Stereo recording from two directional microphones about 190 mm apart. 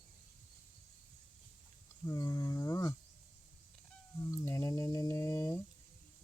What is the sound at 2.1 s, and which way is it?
Mantra, 15° left (ahead or behind).